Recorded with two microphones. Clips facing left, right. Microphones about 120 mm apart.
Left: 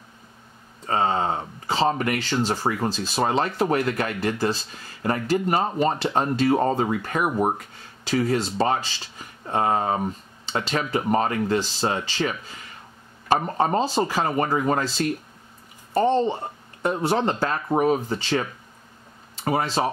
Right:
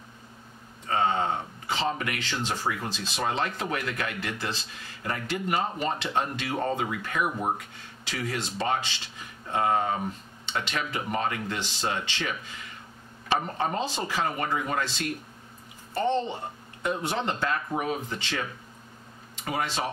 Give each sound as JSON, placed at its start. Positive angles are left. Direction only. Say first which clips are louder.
{"t": 0.8, "sound": "speech", "louder": "left 3 dB", "side_deg": 35}